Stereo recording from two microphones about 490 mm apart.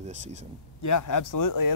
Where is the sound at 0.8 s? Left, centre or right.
Left.